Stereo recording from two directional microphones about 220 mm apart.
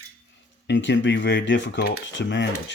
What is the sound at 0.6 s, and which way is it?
Speech, 55° left (ahead or behind).